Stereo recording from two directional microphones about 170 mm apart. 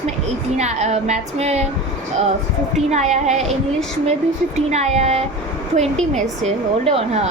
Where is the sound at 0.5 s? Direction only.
40° right (ahead or behind).